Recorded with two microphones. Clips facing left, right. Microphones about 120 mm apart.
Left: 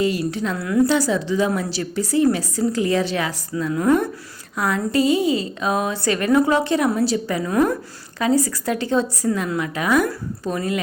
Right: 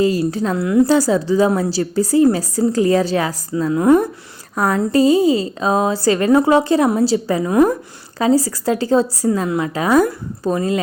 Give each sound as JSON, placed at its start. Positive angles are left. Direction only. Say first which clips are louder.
{"t": 0.0, "sound": "a woman's voice", "louder": "right 5 dB", "side_deg": -35}
{"t": 0.6, "sound": "speech", "louder": "right 4 dB", "side_deg": -25}
{"t": 0.9, "sound": "a woman's voice", "louder": "right 5 dB", "side_deg": -40}
{"t": 4.5, "sound": "a woman's voice", "louder": "right 4 dB", "side_deg": -40}